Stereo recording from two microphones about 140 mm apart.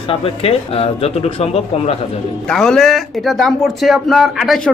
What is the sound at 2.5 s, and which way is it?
A man's voice, 5° left (ahead or behind).